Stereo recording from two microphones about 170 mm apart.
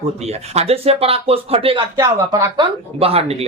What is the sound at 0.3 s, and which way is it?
Speech, 40° right (ahead or behind).